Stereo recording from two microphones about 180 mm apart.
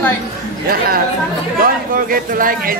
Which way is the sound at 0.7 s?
55° right (ahead or behind).